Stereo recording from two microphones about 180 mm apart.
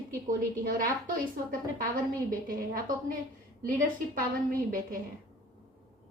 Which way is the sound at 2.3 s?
50° right (ahead or behind).